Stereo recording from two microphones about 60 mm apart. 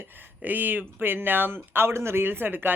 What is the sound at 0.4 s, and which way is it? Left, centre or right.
Speech, right.